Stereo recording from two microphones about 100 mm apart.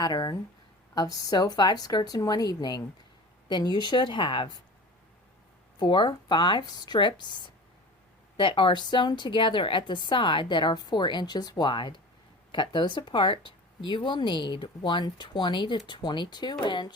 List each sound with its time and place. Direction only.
0.0 s a woman's voice: 45° left (ahead or behind)
5.8 s a woman's voice: 50° left (ahead or behind)